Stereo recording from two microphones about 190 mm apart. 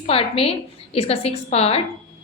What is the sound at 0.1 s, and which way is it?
A woman's voice, 30° left (ahead or behind).